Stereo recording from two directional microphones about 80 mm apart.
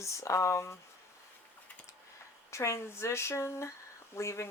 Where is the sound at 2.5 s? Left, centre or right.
Left.